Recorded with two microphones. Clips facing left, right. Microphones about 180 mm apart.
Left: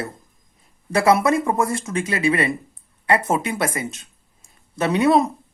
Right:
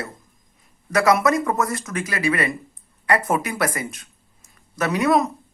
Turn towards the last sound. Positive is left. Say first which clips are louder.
# left 2 dB
turn(degrees=30)  # may be behind; listen again after turning